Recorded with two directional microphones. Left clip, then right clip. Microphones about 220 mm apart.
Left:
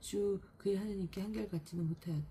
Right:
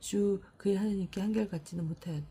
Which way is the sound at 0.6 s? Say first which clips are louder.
Right 5 dB; 45° right (ahead or behind).